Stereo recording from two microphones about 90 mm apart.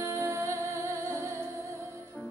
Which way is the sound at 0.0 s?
30° right (ahead or behind).